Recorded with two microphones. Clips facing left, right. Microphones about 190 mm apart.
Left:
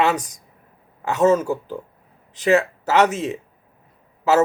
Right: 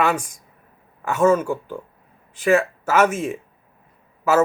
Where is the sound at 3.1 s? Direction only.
20° left (ahead or behind).